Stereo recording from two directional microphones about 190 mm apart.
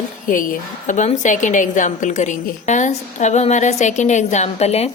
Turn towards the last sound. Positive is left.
turn(degrees=35)  # may be behind; listen again after turning